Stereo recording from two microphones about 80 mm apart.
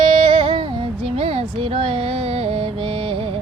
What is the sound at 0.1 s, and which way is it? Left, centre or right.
Music, right.